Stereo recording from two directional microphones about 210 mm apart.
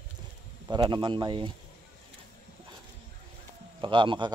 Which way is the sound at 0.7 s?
20° right (ahead or behind).